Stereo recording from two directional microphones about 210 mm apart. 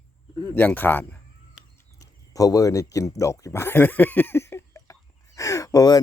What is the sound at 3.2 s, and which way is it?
Speech, 15° left (ahead or behind).